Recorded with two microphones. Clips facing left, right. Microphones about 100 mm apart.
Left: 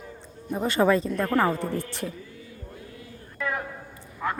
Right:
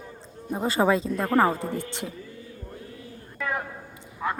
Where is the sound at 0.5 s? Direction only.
20° right (ahead or behind).